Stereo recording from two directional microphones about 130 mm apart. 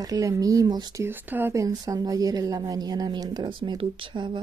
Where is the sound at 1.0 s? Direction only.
15° right (ahead or behind).